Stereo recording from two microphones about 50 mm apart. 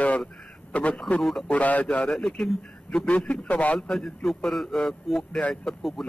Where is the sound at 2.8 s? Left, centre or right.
Left.